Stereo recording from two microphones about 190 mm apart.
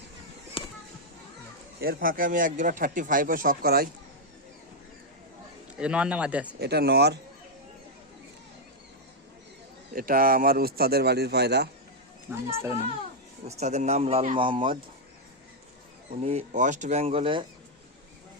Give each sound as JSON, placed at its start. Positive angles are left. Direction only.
{"t": 0.6, "sound": "music", "side_deg": 30}
{"t": 1.8, "sound": "speech", "side_deg": -50}
{"t": 5.7, "sound": "speech", "side_deg": -5}
{"t": 6.6, "sound": "a man's voice", "side_deg": -60}
{"t": 9.9, "sound": "a man's voice", "side_deg": -50}
{"t": 12.3, "sound": "speech", "side_deg": -10}
{"t": 13.4, "sound": "speech", "side_deg": -35}
{"t": 16.2, "sound": "speech", "side_deg": -35}